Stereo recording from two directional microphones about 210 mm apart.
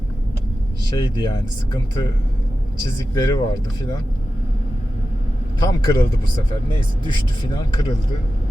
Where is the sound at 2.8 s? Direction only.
20° left (ahead or behind).